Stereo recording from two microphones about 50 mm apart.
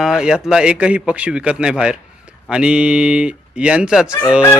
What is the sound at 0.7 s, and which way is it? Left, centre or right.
Speech, right.